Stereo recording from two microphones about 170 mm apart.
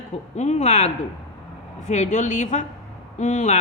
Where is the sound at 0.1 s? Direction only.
40° left (ahead or behind).